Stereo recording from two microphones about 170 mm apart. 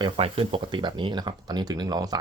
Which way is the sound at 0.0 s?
30° right (ahead or behind).